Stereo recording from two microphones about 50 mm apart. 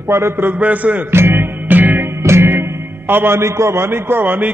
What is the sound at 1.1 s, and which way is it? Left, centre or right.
Music, right.